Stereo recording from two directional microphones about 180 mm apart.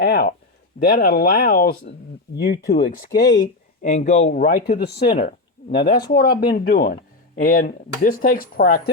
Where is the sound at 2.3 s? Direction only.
65° left (ahead or behind).